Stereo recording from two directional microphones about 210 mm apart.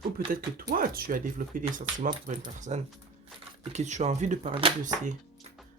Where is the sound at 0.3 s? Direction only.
40° right (ahead or behind).